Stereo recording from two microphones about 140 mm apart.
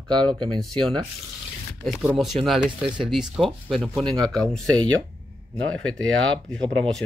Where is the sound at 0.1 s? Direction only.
30° right (ahead or behind).